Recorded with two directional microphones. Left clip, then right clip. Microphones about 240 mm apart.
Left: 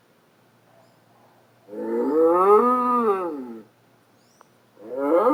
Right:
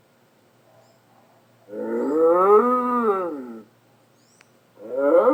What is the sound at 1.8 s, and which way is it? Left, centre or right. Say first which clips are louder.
Wild animals: even; left.